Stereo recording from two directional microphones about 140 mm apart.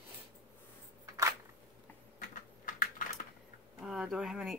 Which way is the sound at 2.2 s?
75° left (ahead or behind).